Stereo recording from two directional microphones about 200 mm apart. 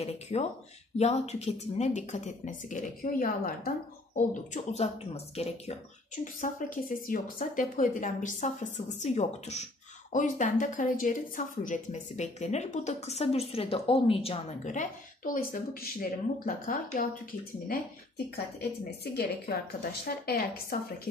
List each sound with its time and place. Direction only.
0.0 s speech: 30° left (ahead or behind)
17.6 s a woman's voice: 55° left (ahead or behind)